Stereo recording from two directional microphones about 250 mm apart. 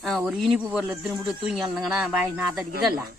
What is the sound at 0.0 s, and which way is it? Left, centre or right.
Speech, centre.